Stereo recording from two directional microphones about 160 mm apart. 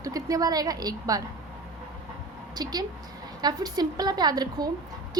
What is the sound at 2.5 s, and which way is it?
A woman's voice, 25° right (ahead or behind).